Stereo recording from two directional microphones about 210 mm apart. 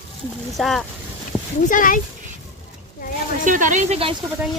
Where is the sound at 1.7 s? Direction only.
40° left (ahead or behind).